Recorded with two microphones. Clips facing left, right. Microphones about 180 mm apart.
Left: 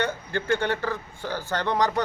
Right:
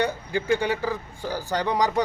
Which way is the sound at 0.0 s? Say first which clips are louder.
Right 2 dB; 10° right (ahead or behind).